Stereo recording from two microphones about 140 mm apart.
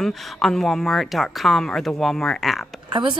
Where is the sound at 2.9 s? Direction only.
35° right (ahead or behind).